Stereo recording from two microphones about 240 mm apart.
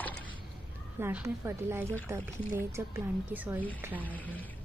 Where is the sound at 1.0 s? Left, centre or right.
Centre.